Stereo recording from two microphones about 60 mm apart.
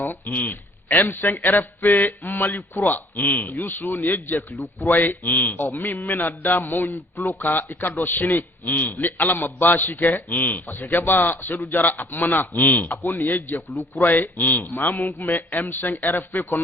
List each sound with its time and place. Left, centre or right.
0.0 s a man's voice: left